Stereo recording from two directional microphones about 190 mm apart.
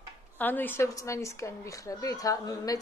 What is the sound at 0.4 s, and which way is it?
A woman's voice, 10° left (ahead or behind).